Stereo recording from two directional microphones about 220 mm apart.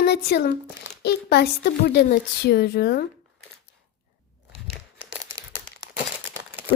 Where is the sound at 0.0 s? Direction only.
50° left (ahead or behind).